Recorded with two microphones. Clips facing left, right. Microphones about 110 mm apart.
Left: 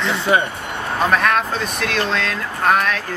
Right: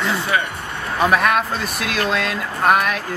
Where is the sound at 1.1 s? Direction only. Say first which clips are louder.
Even; 5° right (ahead or behind).